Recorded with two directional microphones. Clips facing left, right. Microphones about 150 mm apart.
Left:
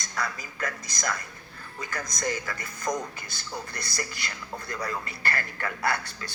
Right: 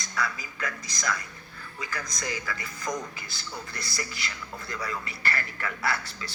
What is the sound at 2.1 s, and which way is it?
A man's voice, 45° left (ahead or behind).